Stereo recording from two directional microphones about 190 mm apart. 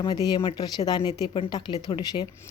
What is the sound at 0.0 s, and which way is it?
Speech, 20° left (ahead or behind).